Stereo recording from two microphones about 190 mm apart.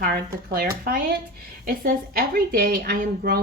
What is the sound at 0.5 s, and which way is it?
A woman's voice, 50° right (ahead or behind).